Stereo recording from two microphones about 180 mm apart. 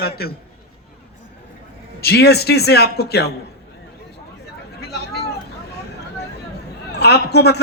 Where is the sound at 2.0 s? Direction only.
60° left (ahead or behind).